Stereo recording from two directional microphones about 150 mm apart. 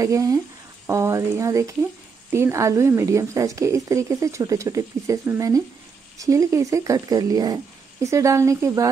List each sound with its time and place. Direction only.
0.0 s a woman's voice: 20° right (ahead or behind)